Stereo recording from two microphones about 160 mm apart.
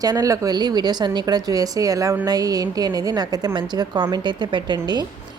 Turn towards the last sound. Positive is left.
turn(degrees=-25)  # may be behind; listen again after turning